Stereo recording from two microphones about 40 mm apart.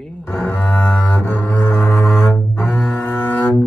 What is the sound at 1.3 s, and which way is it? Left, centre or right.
Music, left.